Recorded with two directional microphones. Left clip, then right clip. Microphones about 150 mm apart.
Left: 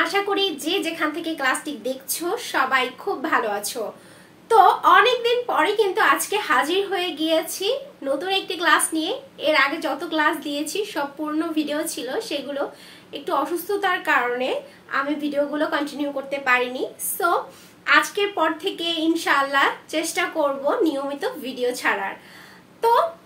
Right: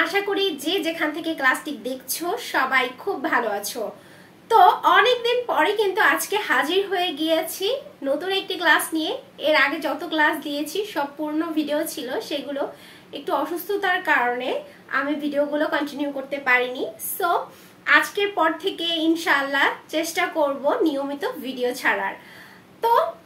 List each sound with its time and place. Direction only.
0.0 s a woman's voice: 10° left (ahead or behind)